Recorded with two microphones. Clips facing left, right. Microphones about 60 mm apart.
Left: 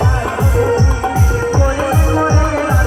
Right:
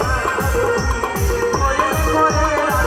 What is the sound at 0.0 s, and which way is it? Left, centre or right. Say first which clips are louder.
Music: left 1 dB; right.